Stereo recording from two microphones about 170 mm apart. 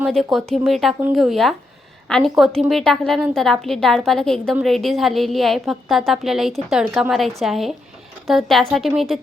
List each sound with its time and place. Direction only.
0.0 s a woman's voice: centre (ahead or behind)